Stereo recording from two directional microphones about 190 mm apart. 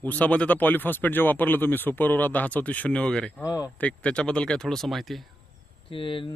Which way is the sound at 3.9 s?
5° left (ahead or behind).